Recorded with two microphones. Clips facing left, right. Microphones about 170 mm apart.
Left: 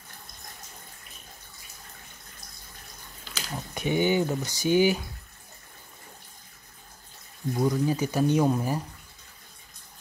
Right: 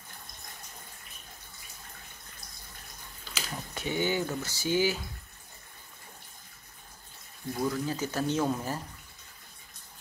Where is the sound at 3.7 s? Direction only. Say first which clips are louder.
Left 6 dB; 15° left (ahead or behind).